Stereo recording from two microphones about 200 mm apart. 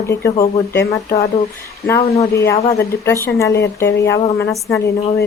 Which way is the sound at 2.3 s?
15° left (ahead or behind).